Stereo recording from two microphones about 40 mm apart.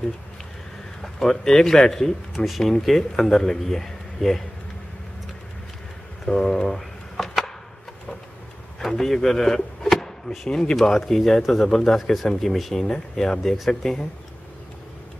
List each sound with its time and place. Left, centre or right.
1.0 s a man's voice: centre
2.3 s speech: centre
3.2 s a man's voice: centre
6.2 s a man's voice: centre
7.2 s a sound: centre
8.8 s speech: centre
10.5 s speech: left
10.9 s a man's voice: centre